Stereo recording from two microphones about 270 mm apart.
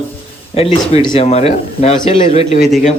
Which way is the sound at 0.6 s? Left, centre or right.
Left.